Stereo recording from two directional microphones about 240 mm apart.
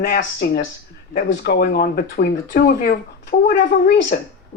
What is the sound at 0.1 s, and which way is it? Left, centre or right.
Speech, left.